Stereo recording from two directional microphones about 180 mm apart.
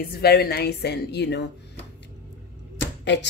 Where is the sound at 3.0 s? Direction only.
75° left (ahead or behind).